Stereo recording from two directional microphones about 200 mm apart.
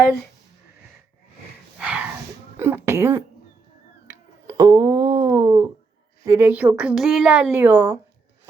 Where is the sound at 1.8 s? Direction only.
5° right (ahead or behind).